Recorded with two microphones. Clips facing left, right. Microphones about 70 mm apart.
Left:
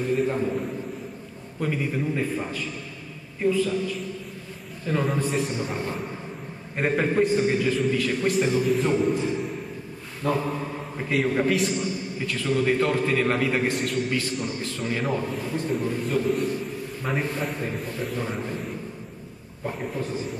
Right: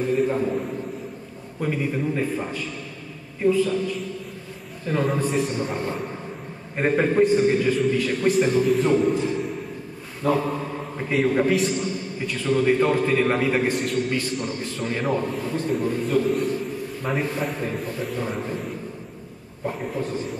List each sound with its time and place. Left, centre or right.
0.1 s a man's voice: centre
4.8 s a man's voice: centre
7.0 s a man's voice: centre
10.7 s a man's voice: centre